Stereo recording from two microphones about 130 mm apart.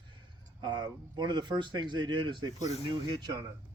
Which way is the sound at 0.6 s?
35° right (ahead or behind).